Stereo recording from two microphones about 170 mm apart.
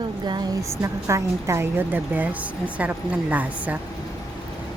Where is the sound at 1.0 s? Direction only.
15° right (ahead or behind).